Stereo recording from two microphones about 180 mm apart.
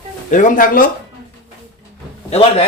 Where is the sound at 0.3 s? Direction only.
45° left (ahead or behind).